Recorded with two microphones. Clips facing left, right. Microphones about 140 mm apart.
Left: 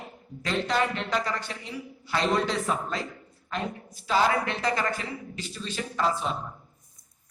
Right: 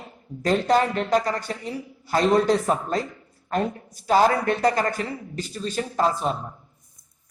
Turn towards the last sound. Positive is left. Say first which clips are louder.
# right 5 dB
turn(degrees=-40)  # may be behind; listen again after turning